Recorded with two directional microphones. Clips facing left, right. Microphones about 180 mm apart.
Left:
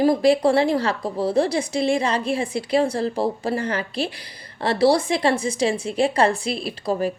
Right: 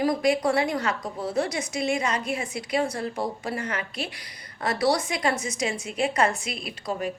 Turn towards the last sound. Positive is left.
turn(degrees=30)  # may be behind; listen again after turning